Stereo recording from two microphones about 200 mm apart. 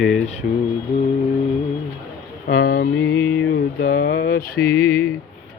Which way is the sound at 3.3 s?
70° left (ahead or behind).